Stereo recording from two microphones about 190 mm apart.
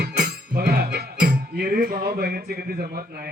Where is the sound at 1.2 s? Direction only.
50° right (ahead or behind).